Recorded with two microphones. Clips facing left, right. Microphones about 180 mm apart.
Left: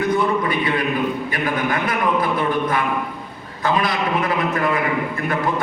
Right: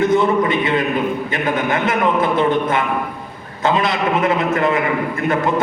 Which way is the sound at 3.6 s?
25° right (ahead or behind).